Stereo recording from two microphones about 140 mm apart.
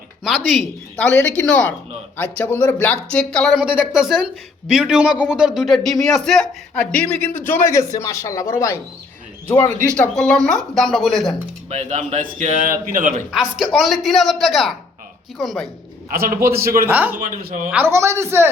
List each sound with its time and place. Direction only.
0.3 s a man's voice: centre (ahead or behind)
0.9 s a man's voice: 10° left (ahead or behind)
11.7 s speech: 55° right (ahead or behind)
13.7 s a man's voice: centre (ahead or behind)
16.1 s a man's voice: 90° right
16.9 s speech: 10° right (ahead or behind)
17.2 s speech: 85° right
17.8 s a woman's voice: 20° right (ahead or behind)